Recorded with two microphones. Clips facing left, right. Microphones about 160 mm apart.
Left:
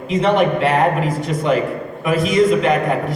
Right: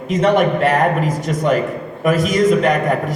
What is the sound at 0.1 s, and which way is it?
A man's voice, 45° right (ahead or behind).